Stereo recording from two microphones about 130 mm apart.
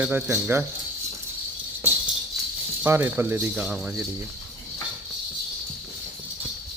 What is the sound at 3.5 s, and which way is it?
Speech, 5° right (ahead or behind).